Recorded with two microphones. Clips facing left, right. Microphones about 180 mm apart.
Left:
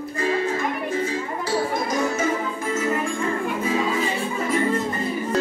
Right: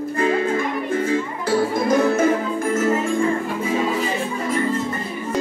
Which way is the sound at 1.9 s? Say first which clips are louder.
Right 6 dB; 55° right (ahead or behind).